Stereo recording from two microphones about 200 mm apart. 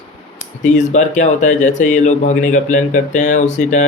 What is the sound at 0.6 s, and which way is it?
Speech, 35° left (ahead or behind).